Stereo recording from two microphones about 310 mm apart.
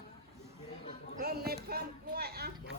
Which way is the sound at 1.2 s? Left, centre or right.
Right.